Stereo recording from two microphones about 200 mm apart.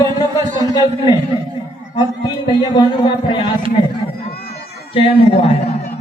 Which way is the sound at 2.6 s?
20° left (ahead or behind).